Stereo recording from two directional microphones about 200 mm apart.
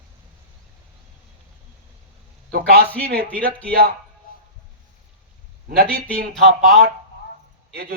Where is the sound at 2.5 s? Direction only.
50° right (ahead or behind).